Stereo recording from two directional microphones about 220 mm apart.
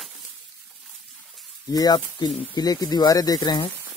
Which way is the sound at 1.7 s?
20° left (ahead or behind).